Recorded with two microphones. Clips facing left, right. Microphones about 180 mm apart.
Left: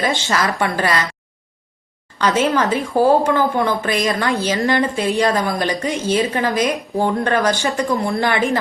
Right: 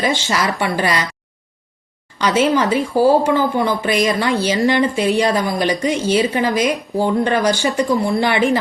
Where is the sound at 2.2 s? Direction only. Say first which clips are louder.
Right 1 dB; 15° right (ahead or behind).